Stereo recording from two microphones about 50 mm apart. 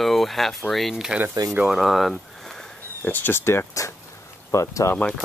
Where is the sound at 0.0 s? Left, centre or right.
Centre.